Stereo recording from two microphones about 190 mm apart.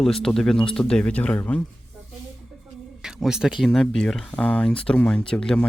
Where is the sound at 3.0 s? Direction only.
5° right (ahead or behind).